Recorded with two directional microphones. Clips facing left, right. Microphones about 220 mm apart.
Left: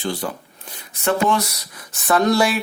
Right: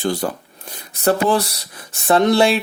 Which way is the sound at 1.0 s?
35° right (ahead or behind).